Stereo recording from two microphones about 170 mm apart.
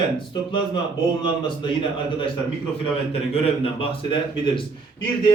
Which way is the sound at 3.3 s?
35° left (ahead or behind).